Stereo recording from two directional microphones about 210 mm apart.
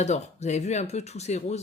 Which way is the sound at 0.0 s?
35° left (ahead or behind).